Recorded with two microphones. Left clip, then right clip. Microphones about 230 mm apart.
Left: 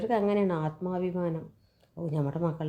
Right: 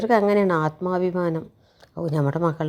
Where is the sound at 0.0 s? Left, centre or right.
Right.